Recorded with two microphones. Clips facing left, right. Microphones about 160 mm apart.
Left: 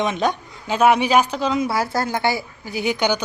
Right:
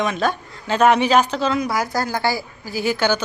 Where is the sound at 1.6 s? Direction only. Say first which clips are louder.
Even; 25° left (ahead or behind).